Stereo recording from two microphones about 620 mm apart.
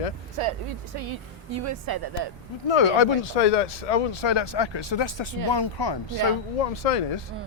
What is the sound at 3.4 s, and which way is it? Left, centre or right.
Speech, left.